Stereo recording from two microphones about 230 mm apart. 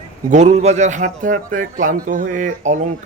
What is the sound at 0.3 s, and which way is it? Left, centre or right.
A man's voice, right.